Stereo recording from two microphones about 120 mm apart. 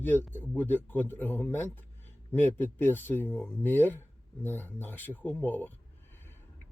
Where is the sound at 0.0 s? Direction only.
15° left (ahead or behind).